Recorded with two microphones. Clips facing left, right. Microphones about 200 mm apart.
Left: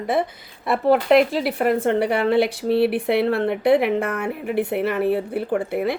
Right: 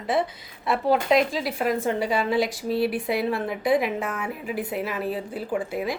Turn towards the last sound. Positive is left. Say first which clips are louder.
# left 5 dB
turn(degrees=60)  # may be behind; listen again after turning